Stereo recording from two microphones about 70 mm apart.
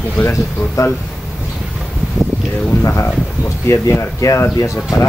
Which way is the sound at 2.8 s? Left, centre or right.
Left.